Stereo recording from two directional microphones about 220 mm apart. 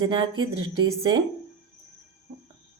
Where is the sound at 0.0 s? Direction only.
20° right (ahead or behind).